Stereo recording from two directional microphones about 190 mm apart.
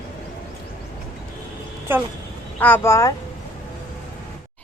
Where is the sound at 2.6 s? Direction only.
10° left (ahead or behind).